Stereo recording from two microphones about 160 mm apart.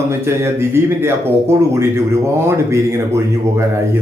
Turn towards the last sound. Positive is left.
turn(degrees=-15)  # may be behind; listen again after turning